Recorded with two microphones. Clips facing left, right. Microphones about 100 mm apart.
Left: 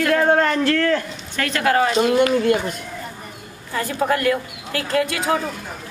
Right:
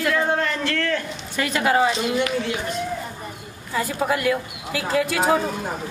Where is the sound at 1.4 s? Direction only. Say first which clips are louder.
Left 1 dB; 10° right (ahead or behind).